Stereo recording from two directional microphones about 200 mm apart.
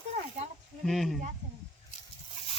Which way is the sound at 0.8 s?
Centre (ahead or behind).